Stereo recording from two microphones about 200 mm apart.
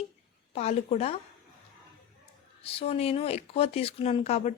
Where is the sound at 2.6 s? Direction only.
30° left (ahead or behind).